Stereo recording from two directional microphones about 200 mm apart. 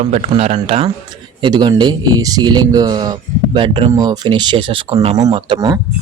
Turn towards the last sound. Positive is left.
turn(degrees=-20)  # may be behind; listen again after turning